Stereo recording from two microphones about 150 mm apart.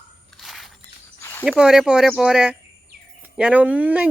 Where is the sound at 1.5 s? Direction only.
5° right (ahead or behind).